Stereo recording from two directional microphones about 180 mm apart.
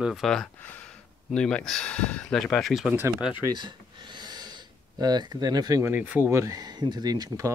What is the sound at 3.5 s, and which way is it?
Speech, 25° right (ahead or behind).